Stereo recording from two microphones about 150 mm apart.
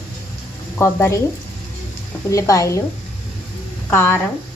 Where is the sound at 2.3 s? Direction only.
20° left (ahead or behind).